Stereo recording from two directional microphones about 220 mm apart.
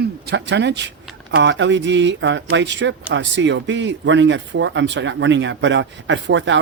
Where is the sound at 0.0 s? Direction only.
50° right (ahead or behind).